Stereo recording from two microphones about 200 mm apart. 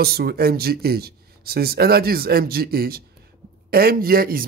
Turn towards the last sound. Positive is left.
turn(degrees=-45)  # may be behind; listen again after turning